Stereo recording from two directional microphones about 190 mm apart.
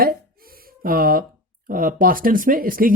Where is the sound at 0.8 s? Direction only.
50° right (ahead or behind).